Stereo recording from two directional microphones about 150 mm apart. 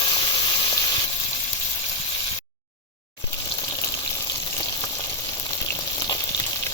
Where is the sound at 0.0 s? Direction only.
30° left (ahead or behind).